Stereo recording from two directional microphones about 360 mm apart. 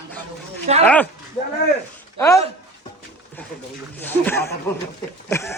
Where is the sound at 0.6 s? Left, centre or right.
Centre.